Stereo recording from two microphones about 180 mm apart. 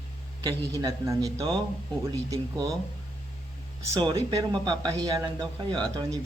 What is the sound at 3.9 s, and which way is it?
Speech, 20° right (ahead or behind).